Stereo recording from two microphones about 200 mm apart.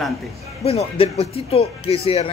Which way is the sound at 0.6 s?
30° left (ahead or behind).